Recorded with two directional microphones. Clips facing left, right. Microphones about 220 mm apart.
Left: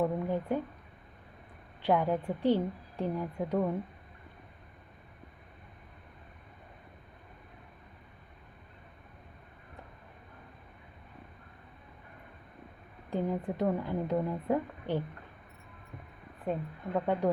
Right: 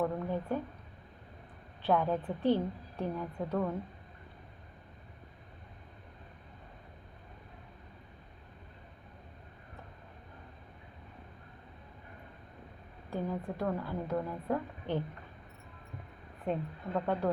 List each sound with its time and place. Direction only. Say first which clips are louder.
0.0 s a woman's voice: left 3 dB; 15° left (ahead or behind)
1.8 s a woman's voice: left 2 dB; 10° left (ahead or behind)
13.1 s a woman's voice: left 4 dB; 20° left (ahead or behind)
16.4 s a woman's voice: even; 5° left (ahead or behind)